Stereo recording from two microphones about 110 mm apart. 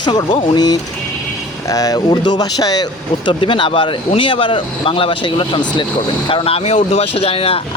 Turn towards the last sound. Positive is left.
turn(degrees=60)  # may be behind; listen again after turning